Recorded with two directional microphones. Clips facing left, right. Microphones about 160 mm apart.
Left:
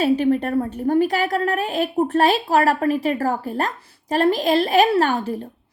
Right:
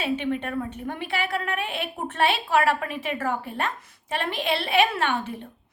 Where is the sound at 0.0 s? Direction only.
40° left (ahead or behind).